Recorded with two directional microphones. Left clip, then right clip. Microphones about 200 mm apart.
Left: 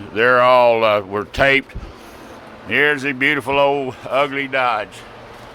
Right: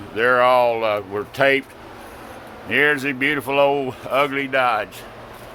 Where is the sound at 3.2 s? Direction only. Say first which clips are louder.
Left 3 dB; 20° left (ahead or behind); by 4.9 s centre (ahead or behind).